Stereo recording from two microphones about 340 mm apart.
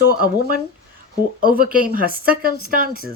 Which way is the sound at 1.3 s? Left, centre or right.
Right.